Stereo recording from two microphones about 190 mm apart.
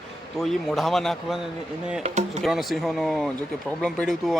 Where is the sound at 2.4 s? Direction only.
Centre (ahead or behind).